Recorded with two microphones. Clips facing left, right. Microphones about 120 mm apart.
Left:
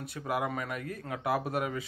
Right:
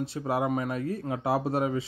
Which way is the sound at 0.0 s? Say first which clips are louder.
Right 5 dB; 30° right (ahead or behind).